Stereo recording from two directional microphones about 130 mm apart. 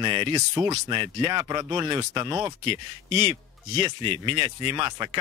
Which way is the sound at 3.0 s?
45° right (ahead or behind).